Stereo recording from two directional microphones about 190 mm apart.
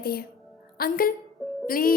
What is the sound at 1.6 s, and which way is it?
Music, 50° left (ahead or behind).